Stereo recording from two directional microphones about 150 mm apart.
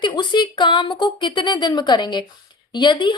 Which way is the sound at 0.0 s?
30° left (ahead or behind).